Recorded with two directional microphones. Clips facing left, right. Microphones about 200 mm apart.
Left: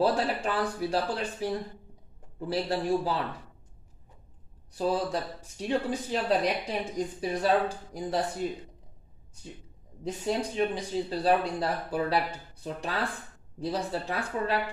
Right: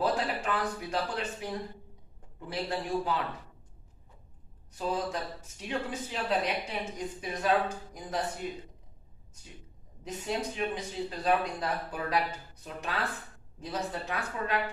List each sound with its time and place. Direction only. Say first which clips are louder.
0.0 s speech: left 4 dB; 30° left (ahead or behind)
4.7 s speech: left 4 dB; 35° left (ahead or behind)
10.0 s speech: left 4 dB; 35° left (ahead or behind)